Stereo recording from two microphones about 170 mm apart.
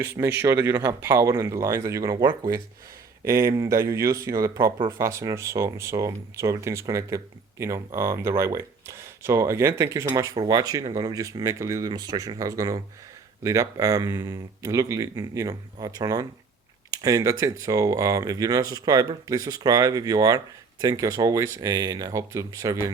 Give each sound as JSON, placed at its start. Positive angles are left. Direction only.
{"t": 0.0, "sound": "speech", "side_deg": -15}